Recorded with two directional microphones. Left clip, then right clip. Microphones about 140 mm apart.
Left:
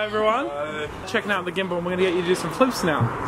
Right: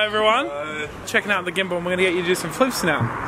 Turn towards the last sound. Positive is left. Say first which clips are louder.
# right 1 dB
turn(degrees=-15)  # may be behind; listen again after turning